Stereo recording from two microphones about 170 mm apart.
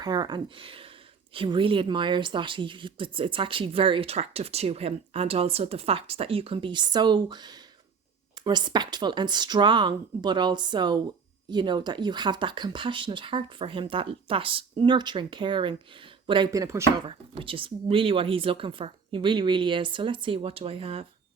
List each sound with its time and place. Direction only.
0.0 s a woman's voice: 25° right (ahead or behind)
17.1 s a woman's voice: 30° right (ahead or behind)